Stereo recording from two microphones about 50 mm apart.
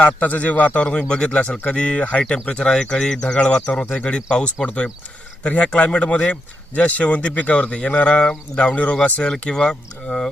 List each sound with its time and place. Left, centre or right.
0.0 s speech: left
0.9 s speech: centre
3.7 s speech: left
9.2 s speech: centre